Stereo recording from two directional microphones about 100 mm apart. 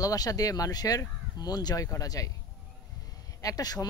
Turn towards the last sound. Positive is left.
turn(degrees=40)  # may be behind; listen again after turning